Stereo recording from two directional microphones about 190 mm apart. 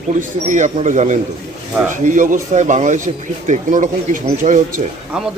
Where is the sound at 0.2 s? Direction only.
40° right (ahead or behind).